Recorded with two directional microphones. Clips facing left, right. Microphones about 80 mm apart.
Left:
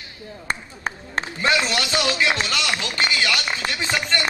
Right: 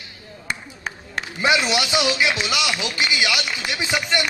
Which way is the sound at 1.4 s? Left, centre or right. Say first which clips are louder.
Right 2 dB; centre.